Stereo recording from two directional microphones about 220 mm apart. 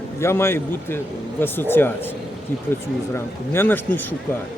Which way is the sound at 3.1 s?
10° left (ahead or behind).